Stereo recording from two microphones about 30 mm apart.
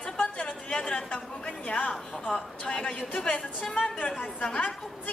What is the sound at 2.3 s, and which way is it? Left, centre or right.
Speech, left.